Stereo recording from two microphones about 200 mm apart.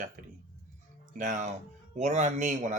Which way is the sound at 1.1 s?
40° right (ahead or behind).